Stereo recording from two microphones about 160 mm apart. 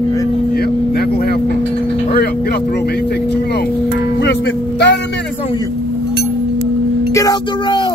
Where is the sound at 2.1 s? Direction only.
75° left (ahead or behind).